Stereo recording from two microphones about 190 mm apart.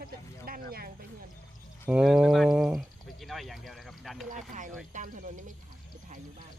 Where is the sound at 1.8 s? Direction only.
5° right (ahead or behind).